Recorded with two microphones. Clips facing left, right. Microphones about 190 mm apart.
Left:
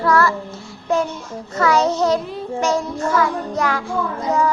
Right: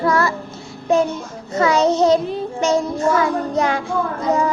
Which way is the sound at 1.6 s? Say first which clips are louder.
Right 2 dB; 20° right (ahead or behind).